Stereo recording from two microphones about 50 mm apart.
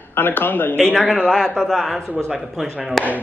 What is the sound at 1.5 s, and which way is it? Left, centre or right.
Speech, centre.